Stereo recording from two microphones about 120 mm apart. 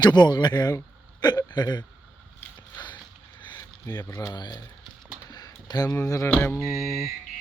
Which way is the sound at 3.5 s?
30° left (ahead or behind).